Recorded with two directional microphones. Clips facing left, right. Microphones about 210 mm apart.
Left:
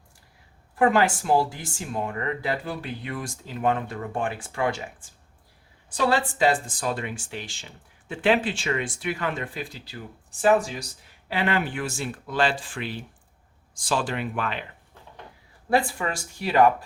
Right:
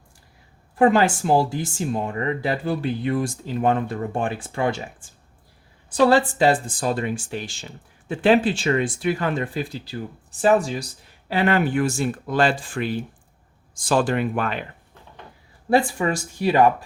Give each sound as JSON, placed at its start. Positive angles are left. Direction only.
{"t": 0.8, "sound": "speech", "side_deg": -25}
{"t": 6.1, "sound": "speech", "side_deg": -35}
{"t": 11.3, "sound": "speech", "side_deg": -45}
{"t": 15.7, "sound": "speech", "side_deg": -20}